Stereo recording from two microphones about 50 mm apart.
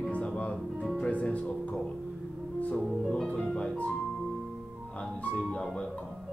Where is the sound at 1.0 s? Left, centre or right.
Left.